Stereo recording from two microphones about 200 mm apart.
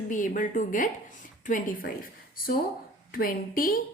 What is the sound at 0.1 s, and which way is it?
A woman's voice, 40° left (ahead or behind).